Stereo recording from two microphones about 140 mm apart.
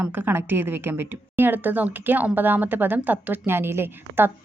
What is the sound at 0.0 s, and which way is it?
A woman's voice, 15° right (ahead or behind).